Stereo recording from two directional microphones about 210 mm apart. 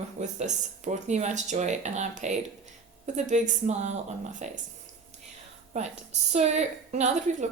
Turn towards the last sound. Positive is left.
turn(degrees=-35)  # may be behind; listen again after turning